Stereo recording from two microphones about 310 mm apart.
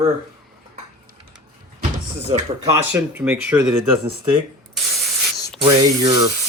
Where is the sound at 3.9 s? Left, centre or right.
Centre.